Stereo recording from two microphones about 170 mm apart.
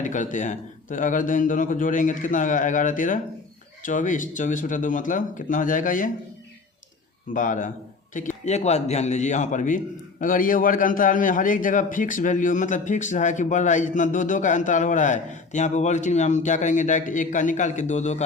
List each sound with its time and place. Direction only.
0.0 s a man's voice: 50° left (ahead or behind)
7.3 s a man's voice: 50° left (ahead or behind)